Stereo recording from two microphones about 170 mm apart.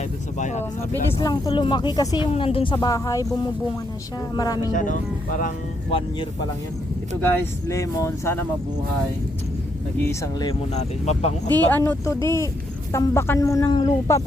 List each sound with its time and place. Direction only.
0.3 s speech: 45° left (ahead or behind)
1.2 s speech: 25° left (ahead or behind)
2.7 s speech: 20° left (ahead or behind)
4.4 s speech: 25° left (ahead or behind)
4.7 s speech: 50° left (ahead or behind)
7.7 s speech: 20° left (ahead or behind)
10.1 s speech: 25° left (ahead or behind)
10.8 s speech: 40° left (ahead or behind)
11.4 s speech: 10° left (ahead or behind)